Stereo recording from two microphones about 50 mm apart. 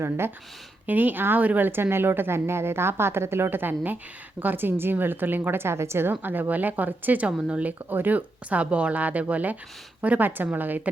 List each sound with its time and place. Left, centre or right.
0.9 s a woman's voice: right